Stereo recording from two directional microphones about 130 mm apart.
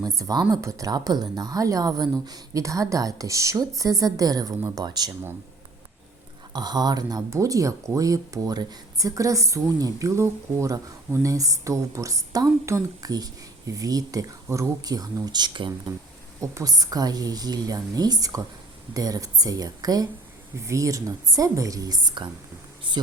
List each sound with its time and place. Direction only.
0.0 s speech: 25° right (ahead or behind)
6.5 s speech: 30° right (ahead or behind)